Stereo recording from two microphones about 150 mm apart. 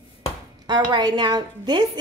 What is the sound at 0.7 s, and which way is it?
Speech, 30° right (ahead or behind).